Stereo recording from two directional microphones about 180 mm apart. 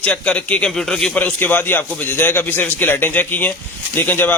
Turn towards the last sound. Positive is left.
turn(degrees=10)  # may be behind; listen again after turning